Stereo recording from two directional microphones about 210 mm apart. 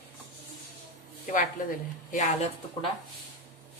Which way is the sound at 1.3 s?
40° left (ahead or behind).